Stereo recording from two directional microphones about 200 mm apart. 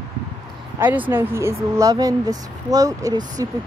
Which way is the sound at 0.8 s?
10° right (ahead or behind).